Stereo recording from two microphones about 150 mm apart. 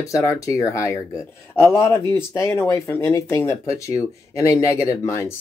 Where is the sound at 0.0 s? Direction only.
20° left (ahead or behind).